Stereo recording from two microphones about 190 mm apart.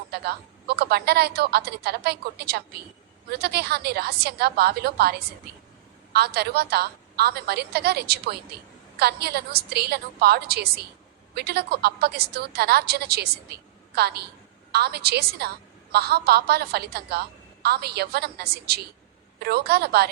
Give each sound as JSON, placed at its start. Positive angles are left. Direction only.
{"t": 0.1, "sound": "a woman's voice", "side_deg": -55}